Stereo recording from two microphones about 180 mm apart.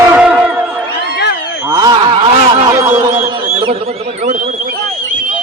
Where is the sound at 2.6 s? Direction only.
20° right (ahead or behind).